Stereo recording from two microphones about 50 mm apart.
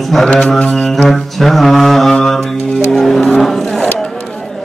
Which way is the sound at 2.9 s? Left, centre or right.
Centre.